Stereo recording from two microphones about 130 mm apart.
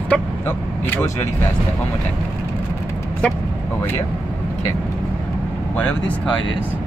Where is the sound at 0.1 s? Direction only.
5° left (ahead or behind).